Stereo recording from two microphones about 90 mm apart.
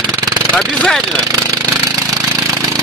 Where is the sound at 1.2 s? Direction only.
40° right (ahead or behind).